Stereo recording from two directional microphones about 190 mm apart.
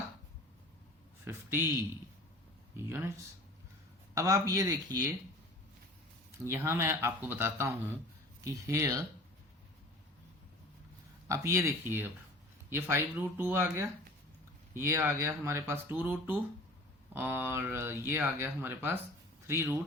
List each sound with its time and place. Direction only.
1.2 s speech: 10° right (ahead or behind)
2.7 s speech: 15° right (ahead or behind)
6.4 s speech: 15° right (ahead or behind)
11.3 s speech: 15° right (ahead or behind)